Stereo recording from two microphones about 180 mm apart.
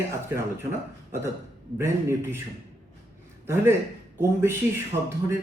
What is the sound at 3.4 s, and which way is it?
A man's voice, 15° right (ahead or behind).